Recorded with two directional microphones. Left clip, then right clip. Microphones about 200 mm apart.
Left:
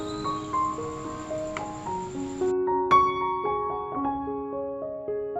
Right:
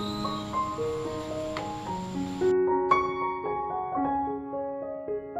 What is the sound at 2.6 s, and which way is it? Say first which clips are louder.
Music: left 5 dB; centre (ahead or behind).